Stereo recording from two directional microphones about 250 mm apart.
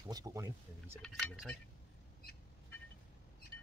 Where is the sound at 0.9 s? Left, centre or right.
Centre.